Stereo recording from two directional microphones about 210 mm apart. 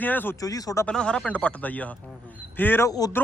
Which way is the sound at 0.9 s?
5° left (ahead or behind).